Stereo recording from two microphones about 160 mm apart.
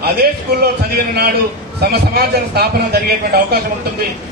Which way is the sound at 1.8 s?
80° right.